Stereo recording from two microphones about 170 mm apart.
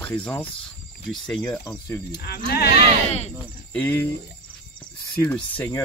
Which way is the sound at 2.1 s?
70° left (ahead or behind).